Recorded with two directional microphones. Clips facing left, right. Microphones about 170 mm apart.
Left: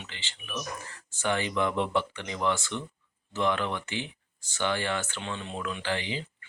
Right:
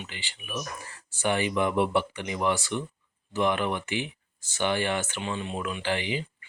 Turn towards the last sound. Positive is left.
turn(degrees=-15)  # may be behind; listen again after turning